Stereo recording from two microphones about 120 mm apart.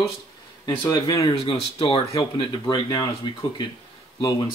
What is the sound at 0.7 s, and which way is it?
Speech, 35° left (ahead or behind).